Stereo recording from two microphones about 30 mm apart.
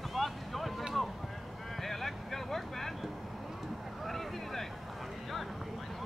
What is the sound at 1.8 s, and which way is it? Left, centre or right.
Vehicle, centre.